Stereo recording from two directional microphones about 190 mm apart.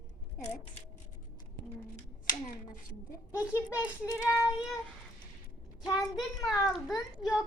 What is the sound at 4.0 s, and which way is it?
Child singing, 15° left (ahead or behind).